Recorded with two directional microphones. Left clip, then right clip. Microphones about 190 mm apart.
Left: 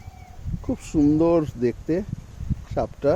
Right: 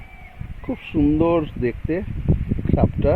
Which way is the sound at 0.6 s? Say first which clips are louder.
Even; 15° left (ahead or behind).